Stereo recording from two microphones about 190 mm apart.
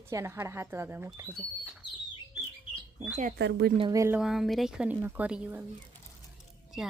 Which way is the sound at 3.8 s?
15° right (ahead or behind).